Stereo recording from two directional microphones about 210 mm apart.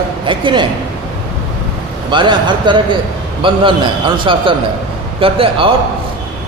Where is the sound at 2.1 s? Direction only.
20° right (ahead or behind).